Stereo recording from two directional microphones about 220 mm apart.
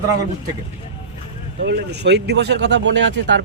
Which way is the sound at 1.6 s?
50° right (ahead or behind).